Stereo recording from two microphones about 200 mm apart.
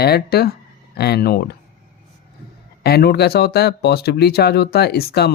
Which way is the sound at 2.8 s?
55° left (ahead or behind).